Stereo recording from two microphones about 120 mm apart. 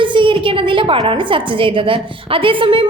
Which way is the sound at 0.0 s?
45° right (ahead or behind).